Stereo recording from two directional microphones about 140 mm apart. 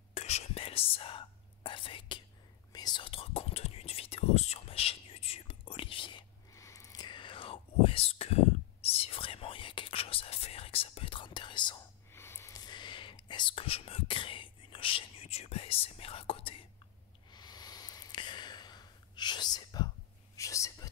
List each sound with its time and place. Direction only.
0.1 s whispering: 50° left (ahead or behind)
6.5 s whispering: 20° left (ahead or behind)
12.1 s a sound: 15° left (ahead or behind); by 13.1 s 35° left (ahead or behind)
13.3 s whispering: 35° left (ahead or behind)
17.3 s a sound: 30° left (ahead or behind)
20.3 s whispering: 20° left (ahead or behind)